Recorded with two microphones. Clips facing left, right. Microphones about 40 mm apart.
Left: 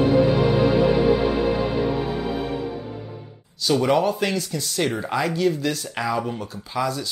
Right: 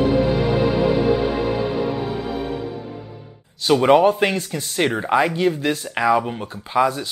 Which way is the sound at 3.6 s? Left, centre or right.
Right.